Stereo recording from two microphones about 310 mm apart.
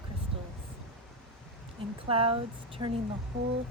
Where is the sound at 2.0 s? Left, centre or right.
Centre.